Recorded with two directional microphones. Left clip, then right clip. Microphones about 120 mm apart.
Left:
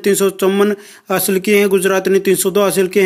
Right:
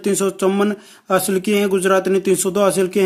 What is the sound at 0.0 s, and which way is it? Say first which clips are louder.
Speech: left 4 dB; 5° left (ahead or behind).